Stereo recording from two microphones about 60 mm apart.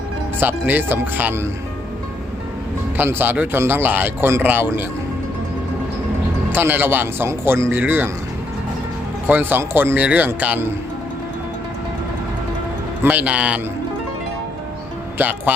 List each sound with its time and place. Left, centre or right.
0.3 s speech: right
3.0 s speech: right
6.5 s speech: right
7.3 s speech: right
9.2 s speech: right
13.0 s a man's voice: right
15.2 s a man's voice: right